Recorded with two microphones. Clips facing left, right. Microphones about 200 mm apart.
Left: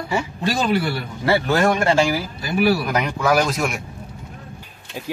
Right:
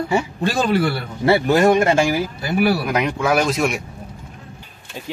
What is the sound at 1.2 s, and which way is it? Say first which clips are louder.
Speech: right 4 dB; 20° right (ahead or behind).